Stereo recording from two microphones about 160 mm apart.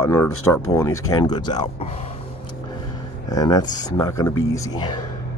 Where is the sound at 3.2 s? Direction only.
25° left (ahead or behind).